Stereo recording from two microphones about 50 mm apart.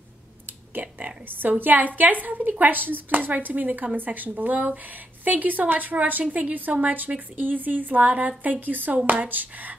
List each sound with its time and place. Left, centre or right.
0.5 s a woman's voice: right